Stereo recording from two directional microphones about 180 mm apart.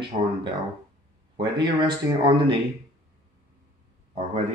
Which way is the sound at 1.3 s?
25° right (ahead or behind).